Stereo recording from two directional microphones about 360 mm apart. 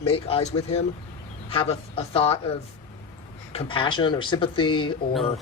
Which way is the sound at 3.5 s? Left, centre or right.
Centre.